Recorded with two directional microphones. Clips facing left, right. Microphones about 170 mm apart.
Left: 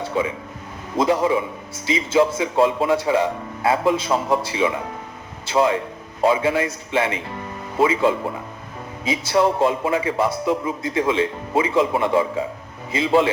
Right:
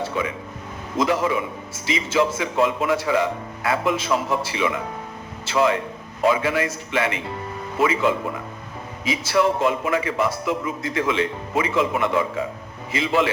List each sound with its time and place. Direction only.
0.1 s a man's voice: 30° left (ahead or behind)